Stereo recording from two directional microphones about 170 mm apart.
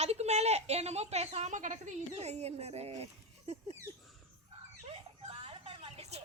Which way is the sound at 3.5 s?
40° right (ahead or behind).